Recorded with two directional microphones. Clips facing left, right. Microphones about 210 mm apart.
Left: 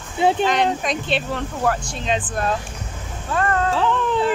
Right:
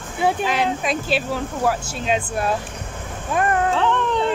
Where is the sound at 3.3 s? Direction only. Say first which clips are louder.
Right 1 dB; 15° right (ahead or behind).